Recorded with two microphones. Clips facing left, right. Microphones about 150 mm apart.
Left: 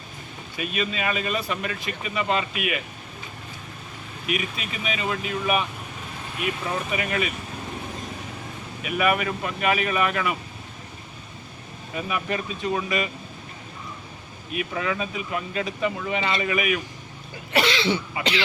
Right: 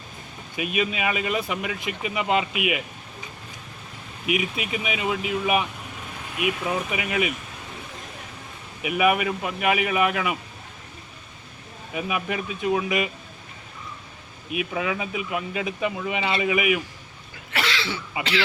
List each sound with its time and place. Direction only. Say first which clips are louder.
0.5 s speech: right 2 dB; 15° right (ahead or behind)
4.3 s speech: right 3 dB; 15° right (ahead or behind)
8.8 s speech: right 2 dB; 15° right (ahead or behind)
11.9 s speech: even; 15° right (ahead or behind)
14.5 s speech: right 1 dB; 10° right (ahead or behind)
17.5 s cough: left 6 dB; 20° left (ahead or behind)
18.2 s a man's voice: even; 20° left (ahead or behind)